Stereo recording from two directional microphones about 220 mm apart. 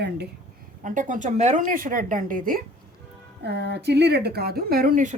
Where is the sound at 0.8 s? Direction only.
35° right (ahead or behind).